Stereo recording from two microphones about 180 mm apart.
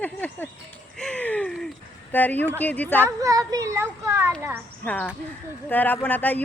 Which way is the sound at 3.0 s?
20° right (ahead or behind).